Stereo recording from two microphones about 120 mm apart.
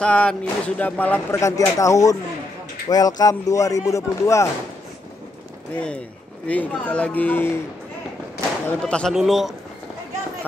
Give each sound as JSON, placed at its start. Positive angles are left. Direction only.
{"t": 0.0, "sound": "speech", "side_deg": 10}
{"t": 1.4, "sound": "speech", "side_deg": 25}
{"t": 5.8, "sound": "speech", "side_deg": 10}
{"t": 8.6, "sound": "speech", "side_deg": 10}
{"t": 9.1, "sound": "speech", "side_deg": 0}